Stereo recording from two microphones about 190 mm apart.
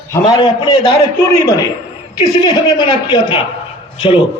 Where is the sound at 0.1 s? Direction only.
20° left (ahead or behind).